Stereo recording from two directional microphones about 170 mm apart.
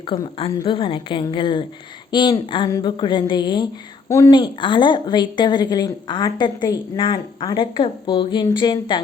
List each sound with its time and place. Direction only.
0.1 s speech: 30° left (ahead or behind)